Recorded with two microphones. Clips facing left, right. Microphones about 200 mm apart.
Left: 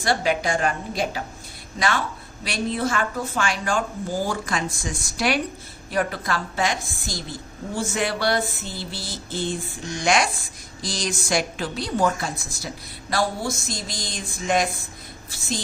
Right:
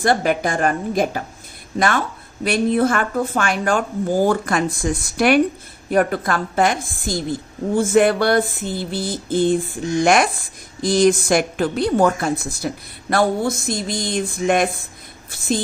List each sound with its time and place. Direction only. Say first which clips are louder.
0.0 s a woman's voice: right 5 dB; 50° right (ahead or behind)
2.4 s a woman's voice: right 8 dB; 55° right (ahead or behind)